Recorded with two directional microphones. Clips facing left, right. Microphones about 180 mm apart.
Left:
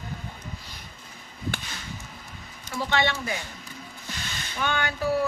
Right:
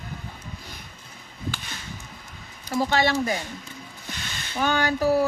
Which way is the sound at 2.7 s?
40° right (ahead or behind).